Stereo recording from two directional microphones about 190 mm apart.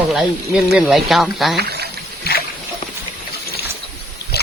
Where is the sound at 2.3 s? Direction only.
55° left (ahead or behind).